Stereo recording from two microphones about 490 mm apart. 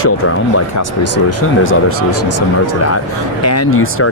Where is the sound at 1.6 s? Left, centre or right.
Left.